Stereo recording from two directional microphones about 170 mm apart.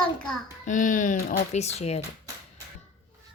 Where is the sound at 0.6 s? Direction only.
50° left (ahead or behind).